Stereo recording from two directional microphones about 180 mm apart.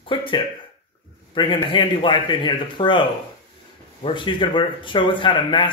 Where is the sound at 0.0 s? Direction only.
30° left (ahead or behind).